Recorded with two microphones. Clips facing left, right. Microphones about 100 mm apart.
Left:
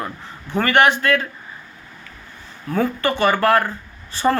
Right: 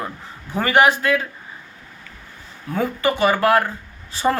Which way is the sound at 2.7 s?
5° right (ahead or behind).